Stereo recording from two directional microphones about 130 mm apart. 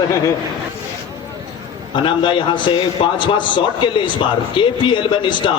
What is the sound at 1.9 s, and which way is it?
A man's voice, 40° left (ahead or behind).